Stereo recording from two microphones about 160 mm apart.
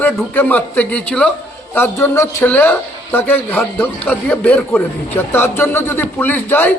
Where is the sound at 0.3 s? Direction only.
10° left (ahead or behind).